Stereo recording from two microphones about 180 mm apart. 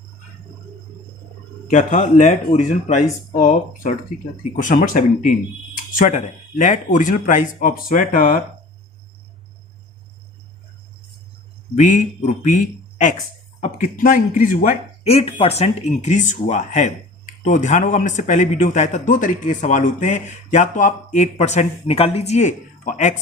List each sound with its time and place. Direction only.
1.7 s speech: 45° left (ahead or behind)
11.7 s a man's voice: 45° left (ahead or behind)